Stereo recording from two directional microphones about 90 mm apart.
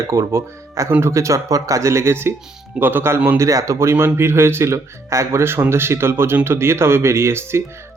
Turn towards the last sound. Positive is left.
turn(degrees=-30)  # may be behind; listen again after turning